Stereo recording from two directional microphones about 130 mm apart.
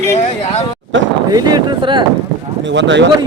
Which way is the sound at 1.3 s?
30° right (ahead or behind).